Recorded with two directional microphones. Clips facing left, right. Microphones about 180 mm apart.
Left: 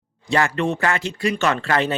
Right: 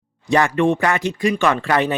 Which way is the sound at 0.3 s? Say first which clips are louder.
Right 4 dB; 15° right (ahead or behind).